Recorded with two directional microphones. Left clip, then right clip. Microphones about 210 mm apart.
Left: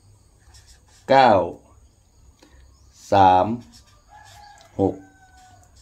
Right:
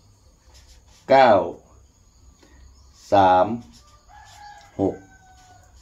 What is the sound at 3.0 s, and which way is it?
Speech, 55° left (ahead or behind).